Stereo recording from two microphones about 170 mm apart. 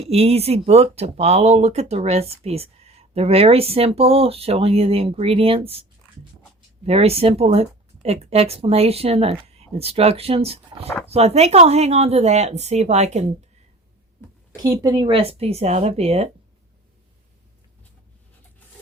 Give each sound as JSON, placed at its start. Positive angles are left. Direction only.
{"t": 0.0, "sound": "speech", "side_deg": -35}
{"t": 6.8, "sound": "speech", "side_deg": -35}
{"t": 14.5, "sound": "speech", "side_deg": -20}